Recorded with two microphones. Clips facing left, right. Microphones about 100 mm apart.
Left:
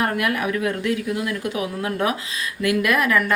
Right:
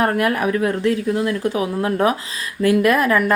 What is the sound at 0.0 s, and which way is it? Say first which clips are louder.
Speech: right 4 dB; 35° right (ahead or behind).